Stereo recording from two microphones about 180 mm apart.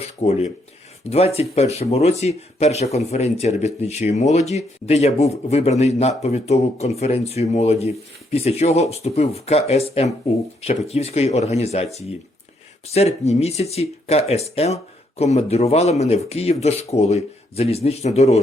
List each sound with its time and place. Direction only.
0.0 s speech: 35° left (ahead or behind)